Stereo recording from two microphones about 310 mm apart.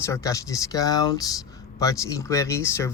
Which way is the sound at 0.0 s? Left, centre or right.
Centre.